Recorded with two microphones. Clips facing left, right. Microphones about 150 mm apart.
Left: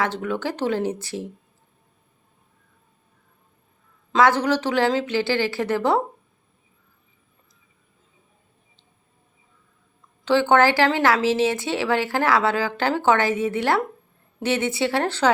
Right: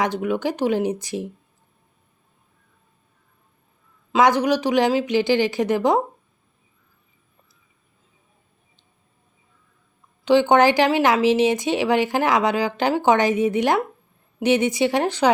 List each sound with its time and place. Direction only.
0.0 s a woman's voice: 15° right (ahead or behind)
4.1 s a woman's voice: 15° right (ahead or behind)
10.2 s a woman's voice: 15° right (ahead or behind)